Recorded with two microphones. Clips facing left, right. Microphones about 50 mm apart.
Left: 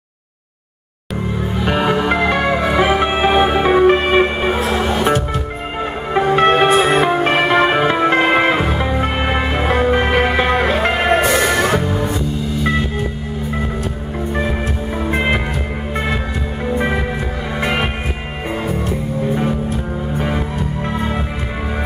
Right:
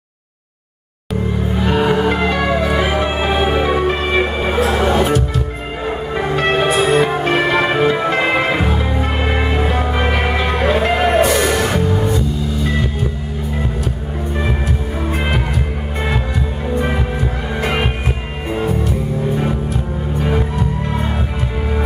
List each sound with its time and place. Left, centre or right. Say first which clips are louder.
1.7 s music: right 1 dB; left
4.7 s music: right 3 dB; centre
6.1 s music: left 5 dB; left
10.4 s music: left 1 dB; left
15.0 s music: left 3 dB; left